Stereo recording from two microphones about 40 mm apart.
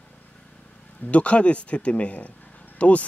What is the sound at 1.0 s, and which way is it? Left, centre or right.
Speech, left.